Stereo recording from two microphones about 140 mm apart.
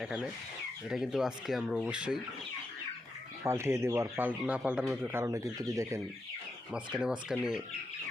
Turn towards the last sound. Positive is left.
turn(degrees=-5)  # may be behind; listen again after turning